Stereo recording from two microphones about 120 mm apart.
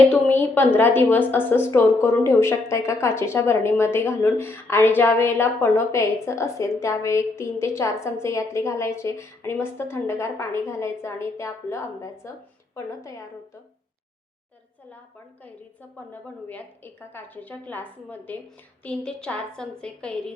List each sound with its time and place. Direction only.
0.0 s a woman's voice: 15° left (ahead or behind)
16.1 s a woman's voice: 15° left (ahead or behind)